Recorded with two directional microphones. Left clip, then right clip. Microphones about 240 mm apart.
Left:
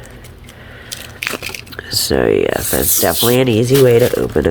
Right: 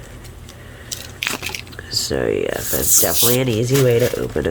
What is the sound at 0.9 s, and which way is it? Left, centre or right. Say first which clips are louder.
Squish: left 2 dB; centre.